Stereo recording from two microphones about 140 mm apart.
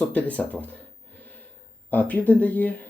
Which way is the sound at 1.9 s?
10° left (ahead or behind).